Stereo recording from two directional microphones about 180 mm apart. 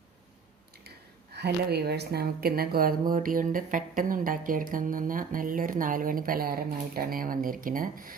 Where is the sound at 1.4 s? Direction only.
65° right (ahead or behind).